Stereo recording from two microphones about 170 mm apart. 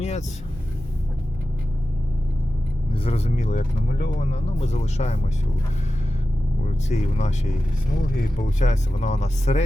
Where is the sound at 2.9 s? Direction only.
35° left (ahead or behind).